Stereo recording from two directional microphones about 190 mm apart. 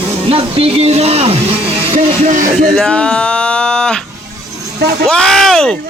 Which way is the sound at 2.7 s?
5° left (ahead or behind).